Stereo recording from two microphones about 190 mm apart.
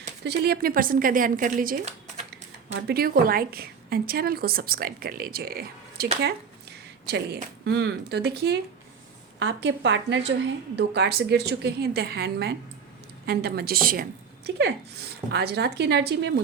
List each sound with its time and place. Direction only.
0.3 s a woman's voice: 55° right (ahead or behind)
2.8 s a woman's voice: 55° right (ahead or behind)
6.2 s a sound: 60° right (ahead or behind)
7.6 s a woman's voice: 60° right (ahead or behind)
9.4 s a woman's voice: 70° right (ahead or behind)